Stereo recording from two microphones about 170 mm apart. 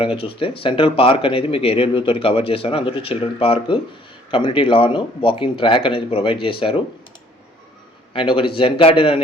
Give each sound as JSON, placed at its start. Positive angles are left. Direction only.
{"t": 0.2, "sound": "speech", "side_deg": 30}
{"t": 8.1, "sound": "speech", "side_deg": 30}